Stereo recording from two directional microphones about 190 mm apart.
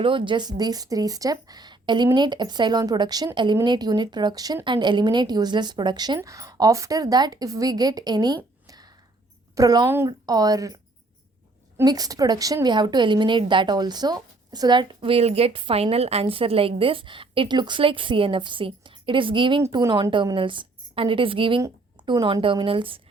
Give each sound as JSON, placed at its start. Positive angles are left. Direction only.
{"t": 0.0, "sound": "a woman's voice", "side_deg": -25}
{"t": 8.6, "sound": "a sound", "side_deg": -20}
{"t": 9.6, "sound": "a woman's voice", "side_deg": -20}
{"t": 11.8, "sound": "a woman's voice", "side_deg": -20}